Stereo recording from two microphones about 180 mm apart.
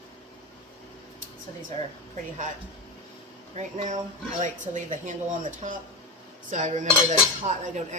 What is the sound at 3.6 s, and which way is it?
Cutlery, 40° right (ahead or behind).